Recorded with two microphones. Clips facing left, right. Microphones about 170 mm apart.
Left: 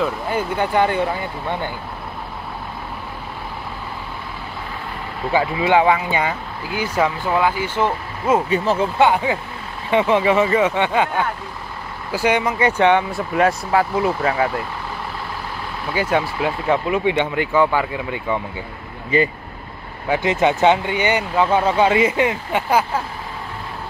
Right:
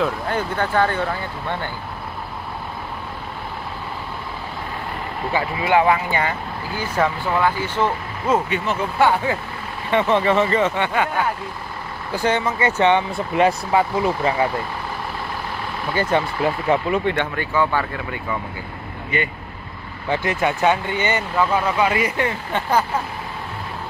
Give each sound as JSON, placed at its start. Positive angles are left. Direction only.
{"t": 0.0, "sound": "speech", "side_deg": 10}
{"t": 5.3, "sound": "speech", "side_deg": 20}
{"t": 8.5, "sound": "speech", "side_deg": 35}
{"t": 8.9, "sound": "speech", "side_deg": 20}
{"t": 12.1, "sound": "speech", "side_deg": 10}
{"t": 13.1, "sound": "speech", "side_deg": 0}
{"t": 15.9, "sound": "speech", "side_deg": 10}
{"t": 17.1, "sound": "speech", "side_deg": 15}
{"t": 19.0, "sound": "speech", "side_deg": 30}
{"t": 20.1, "sound": "speech", "side_deg": 20}
{"t": 21.5, "sound": "speech", "side_deg": 25}